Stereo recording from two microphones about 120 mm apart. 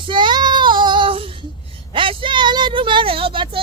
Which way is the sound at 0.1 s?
40° right (ahead or behind).